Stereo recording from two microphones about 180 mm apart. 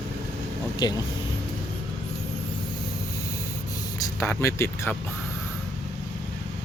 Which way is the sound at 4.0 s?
15° left (ahead or behind).